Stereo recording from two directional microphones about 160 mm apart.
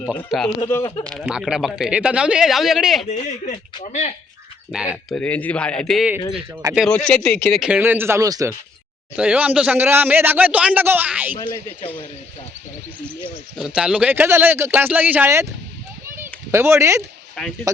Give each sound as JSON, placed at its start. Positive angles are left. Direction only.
{"t": 0.3, "sound": "speech", "side_deg": 0}
{"t": 0.7, "sound": "speech", "side_deg": 25}
{"t": 1.2, "sound": "speech", "side_deg": -5}
{"t": 3.1, "sound": "speech", "side_deg": 45}
{"t": 4.7, "sound": "speech", "side_deg": -5}
{"t": 5.1, "sound": "speech", "side_deg": 10}
{"t": 7.7, "sound": "a man's voice", "side_deg": -15}
{"t": 9.1, "sound": "a man's voice", "side_deg": -10}
{"t": 13.6, "sound": "a man's voice", "side_deg": -5}
{"t": 16.1, "sound": "a sound", "side_deg": -15}
{"t": 17.4, "sound": "speech", "side_deg": 5}